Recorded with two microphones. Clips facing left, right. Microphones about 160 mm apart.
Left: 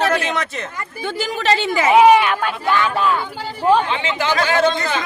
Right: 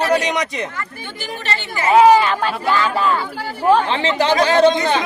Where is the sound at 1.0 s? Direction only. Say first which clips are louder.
Left 6 dB; 90° left.